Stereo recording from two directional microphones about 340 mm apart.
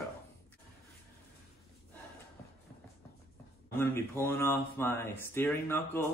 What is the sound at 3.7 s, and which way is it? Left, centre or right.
Speech, centre.